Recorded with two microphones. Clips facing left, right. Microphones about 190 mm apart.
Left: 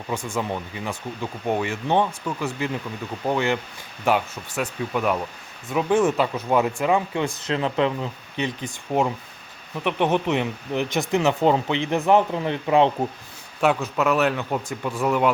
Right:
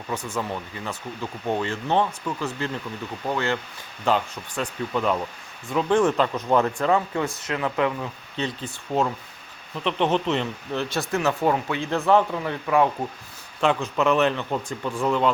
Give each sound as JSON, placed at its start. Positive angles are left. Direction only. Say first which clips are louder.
{"t": 0.1, "sound": "speech", "louder": "left 2 dB", "side_deg": 10}
{"t": 7.4, "sound": "speech", "louder": "left 3 dB", "side_deg": 25}
{"t": 8.4, "sound": "speech", "louder": "left 1 dB", "side_deg": 15}
{"t": 13.6, "sound": "speech", "louder": "left 1 dB", "side_deg": 5}